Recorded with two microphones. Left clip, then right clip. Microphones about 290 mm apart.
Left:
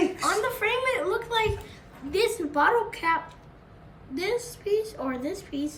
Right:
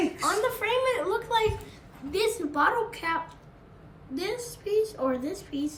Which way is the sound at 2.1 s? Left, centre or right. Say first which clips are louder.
Left 2 dB; centre.